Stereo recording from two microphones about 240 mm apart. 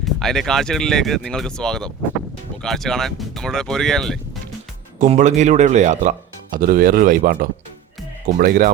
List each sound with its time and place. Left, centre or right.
0.0 s speech: centre
4.9 s speech: right